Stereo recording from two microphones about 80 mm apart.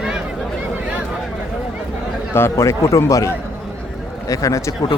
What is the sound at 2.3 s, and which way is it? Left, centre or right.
A man's voice, left.